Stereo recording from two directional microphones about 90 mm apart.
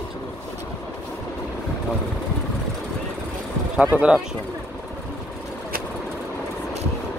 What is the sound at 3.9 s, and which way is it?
Speech, 20° right (ahead or behind).